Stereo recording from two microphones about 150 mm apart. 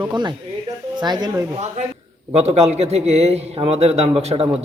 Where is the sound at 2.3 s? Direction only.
45° right (ahead or behind).